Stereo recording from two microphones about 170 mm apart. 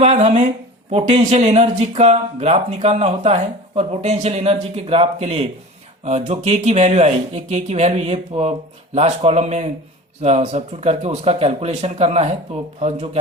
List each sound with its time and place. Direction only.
0.0 s speech: 40° right (ahead or behind)